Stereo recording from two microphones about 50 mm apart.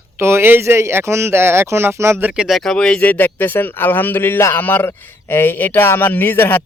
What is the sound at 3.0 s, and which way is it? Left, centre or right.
A man's voice, left.